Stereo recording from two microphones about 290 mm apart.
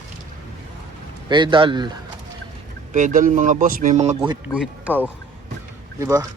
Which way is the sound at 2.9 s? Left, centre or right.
Right.